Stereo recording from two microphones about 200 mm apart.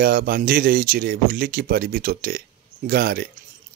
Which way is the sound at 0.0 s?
50° right (ahead or behind).